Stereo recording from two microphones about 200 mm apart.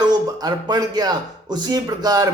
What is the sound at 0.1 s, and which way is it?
Speech, 20° right (ahead or behind).